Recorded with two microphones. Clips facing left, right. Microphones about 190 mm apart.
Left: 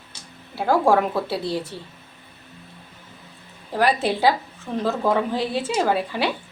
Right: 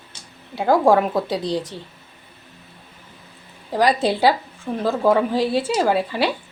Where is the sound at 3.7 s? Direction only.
15° right (ahead or behind).